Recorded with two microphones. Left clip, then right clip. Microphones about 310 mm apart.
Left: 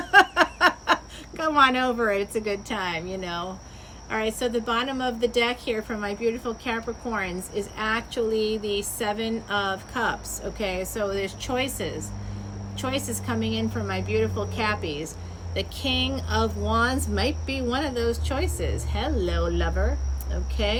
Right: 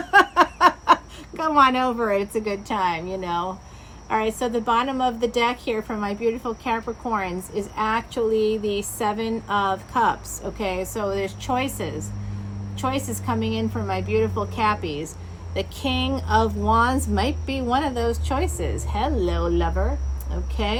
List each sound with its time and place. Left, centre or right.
0.1 s snicker: centre
1.4 s a woman's voice: centre